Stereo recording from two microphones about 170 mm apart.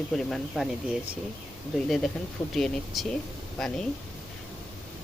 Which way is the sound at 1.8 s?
Centre (ahead or behind).